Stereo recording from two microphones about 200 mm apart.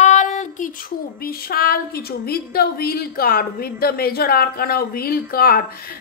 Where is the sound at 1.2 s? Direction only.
50° left (ahead or behind).